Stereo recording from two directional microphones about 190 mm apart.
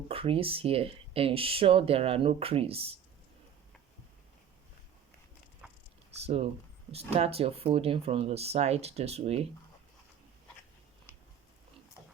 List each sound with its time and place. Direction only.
0.1 s speech: 30° right (ahead or behind)
6.2 s speech: 30° right (ahead or behind)